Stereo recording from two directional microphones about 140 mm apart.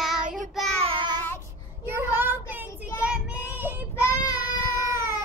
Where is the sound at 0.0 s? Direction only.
5° right (ahead or behind).